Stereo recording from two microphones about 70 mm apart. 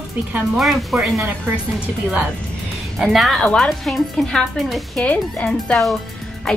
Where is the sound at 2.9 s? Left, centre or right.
Centre.